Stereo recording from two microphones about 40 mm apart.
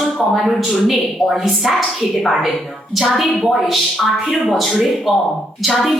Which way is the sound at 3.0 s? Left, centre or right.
Centre.